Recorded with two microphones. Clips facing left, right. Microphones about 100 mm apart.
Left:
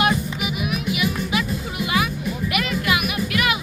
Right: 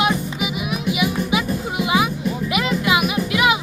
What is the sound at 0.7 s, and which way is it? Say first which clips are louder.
Music: right 3 dB; 20° right (ahead or behind).